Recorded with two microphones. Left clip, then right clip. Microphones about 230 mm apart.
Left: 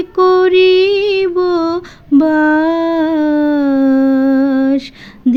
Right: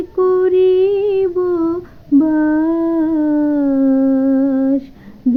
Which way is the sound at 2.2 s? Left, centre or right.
Left.